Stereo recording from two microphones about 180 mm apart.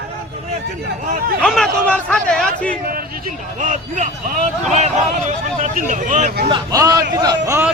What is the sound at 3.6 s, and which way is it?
Speech, 45° right (ahead or behind).